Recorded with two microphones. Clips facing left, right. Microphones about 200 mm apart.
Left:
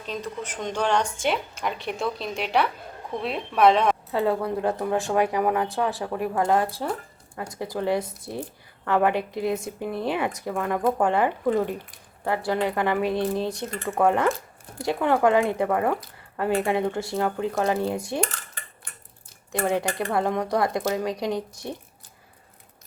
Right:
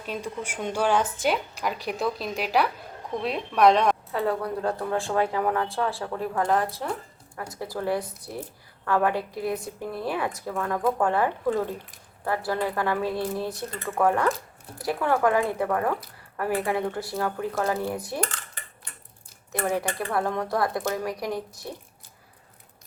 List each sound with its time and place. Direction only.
0.0 s a woman's voice: 10° right (ahead or behind)
4.1 s speech: 25° left (ahead or behind)
19.5 s speech: 25° left (ahead or behind)